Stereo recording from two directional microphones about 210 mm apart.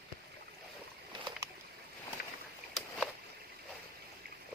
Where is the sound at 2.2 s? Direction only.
50° left (ahead or behind).